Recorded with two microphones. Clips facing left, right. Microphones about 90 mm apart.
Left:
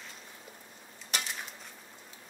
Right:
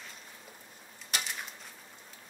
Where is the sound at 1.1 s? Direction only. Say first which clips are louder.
Even; 5° right (ahead or behind).